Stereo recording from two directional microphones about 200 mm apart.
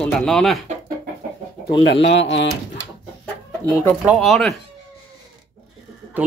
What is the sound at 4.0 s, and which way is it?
Speech, 5° right (ahead or behind).